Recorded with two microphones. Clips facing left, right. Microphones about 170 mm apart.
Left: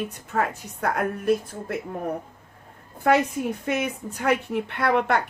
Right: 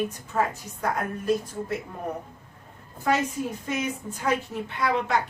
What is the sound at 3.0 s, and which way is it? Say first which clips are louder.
A woman's voice: left 4 dB; 60° left (ahead or behind).